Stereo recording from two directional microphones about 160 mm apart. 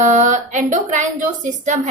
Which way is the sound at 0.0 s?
50° right (ahead or behind).